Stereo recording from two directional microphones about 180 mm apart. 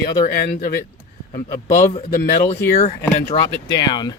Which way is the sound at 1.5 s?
15° left (ahead or behind).